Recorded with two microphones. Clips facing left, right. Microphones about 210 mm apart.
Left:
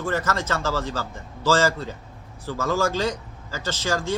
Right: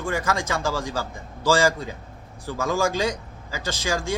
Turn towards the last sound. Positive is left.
turn(degrees=-10)  # may be behind; listen again after turning